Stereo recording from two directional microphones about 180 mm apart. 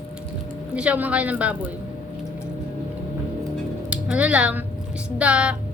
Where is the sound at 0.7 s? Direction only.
5° right (ahead or behind).